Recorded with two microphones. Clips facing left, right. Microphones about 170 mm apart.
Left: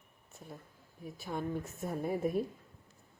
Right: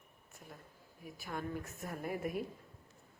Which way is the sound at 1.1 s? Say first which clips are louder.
Left 4 dB; 25° left (ahead or behind).